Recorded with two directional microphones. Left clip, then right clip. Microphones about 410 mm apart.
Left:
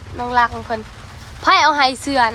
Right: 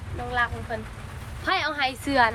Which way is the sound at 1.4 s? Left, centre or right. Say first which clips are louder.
Left 12 dB; centre.